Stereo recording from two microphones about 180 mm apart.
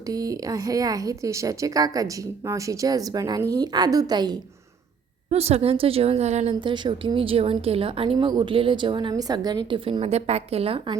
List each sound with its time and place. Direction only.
0.1 s a woman's voice: 20° right (ahead or behind)
5.3 s a woman's voice: 35° right (ahead or behind)
6.5 s a woman's voice: 25° right (ahead or behind)